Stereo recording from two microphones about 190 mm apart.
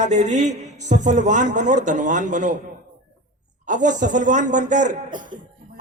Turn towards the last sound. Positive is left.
turn(degrees=-40)  # may be behind; listen again after turning